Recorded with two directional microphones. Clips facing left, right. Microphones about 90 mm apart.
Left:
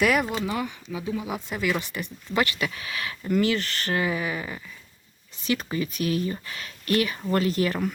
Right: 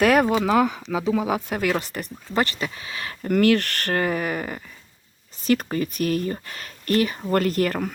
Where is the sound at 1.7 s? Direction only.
40° right (ahead or behind).